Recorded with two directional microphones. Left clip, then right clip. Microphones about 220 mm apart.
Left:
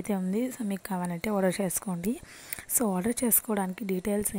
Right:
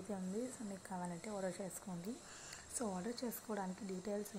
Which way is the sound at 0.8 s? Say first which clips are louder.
Left 14 dB; 65° left (ahead or behind).